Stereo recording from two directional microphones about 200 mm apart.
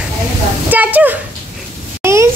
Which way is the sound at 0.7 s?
10° right (ahead or behind).